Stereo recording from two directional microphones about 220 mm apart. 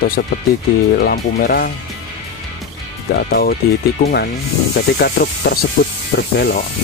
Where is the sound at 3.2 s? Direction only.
45° left (ahead or behind).